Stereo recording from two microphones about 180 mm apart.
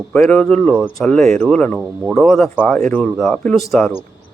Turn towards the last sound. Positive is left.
turn(degrees=0)  # may be behind; listen again after turning